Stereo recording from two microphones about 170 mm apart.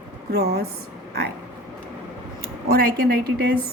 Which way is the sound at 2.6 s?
60° right (ahead or behind).